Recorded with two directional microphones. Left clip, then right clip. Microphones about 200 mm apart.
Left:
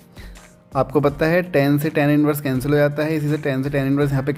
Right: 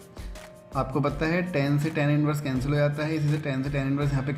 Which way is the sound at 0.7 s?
50° left (ahead or behind).